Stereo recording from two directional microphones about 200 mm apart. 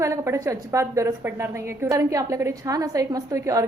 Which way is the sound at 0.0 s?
15° right (ahead or behind).